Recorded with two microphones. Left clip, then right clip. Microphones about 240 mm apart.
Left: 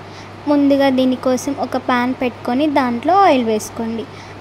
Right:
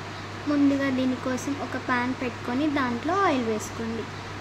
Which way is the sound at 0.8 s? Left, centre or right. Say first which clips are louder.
Left 12 dB; left.